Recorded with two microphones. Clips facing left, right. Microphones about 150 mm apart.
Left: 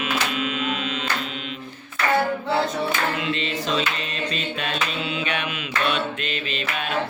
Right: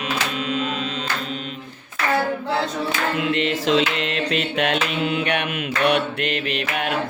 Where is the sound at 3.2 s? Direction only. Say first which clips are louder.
Right 5 dB; 65° right (ahead or behind).